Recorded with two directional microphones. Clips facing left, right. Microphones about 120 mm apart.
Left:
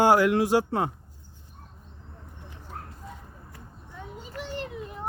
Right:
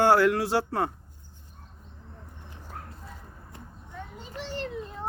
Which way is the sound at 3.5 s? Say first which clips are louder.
Right 3 dB; 25° right (ahead or behind).